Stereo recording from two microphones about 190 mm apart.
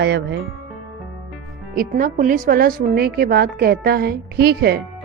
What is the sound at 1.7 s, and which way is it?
A woman's voice, 45° right (ahead or behind).